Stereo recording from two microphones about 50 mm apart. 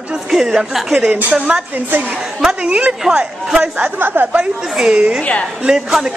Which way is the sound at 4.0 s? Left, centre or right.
Right.